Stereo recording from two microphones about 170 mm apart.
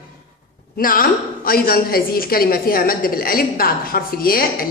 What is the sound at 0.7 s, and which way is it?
A woman's voice, 55° left (ahead or behind).